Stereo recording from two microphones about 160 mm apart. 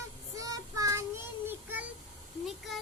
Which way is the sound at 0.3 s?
20° right (ahead or behind).